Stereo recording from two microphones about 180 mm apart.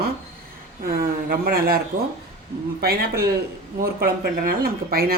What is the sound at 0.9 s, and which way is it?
Speech, 55° right (ahead or behind).